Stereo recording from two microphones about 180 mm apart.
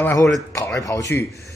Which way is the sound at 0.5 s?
15° left (ahead or behind).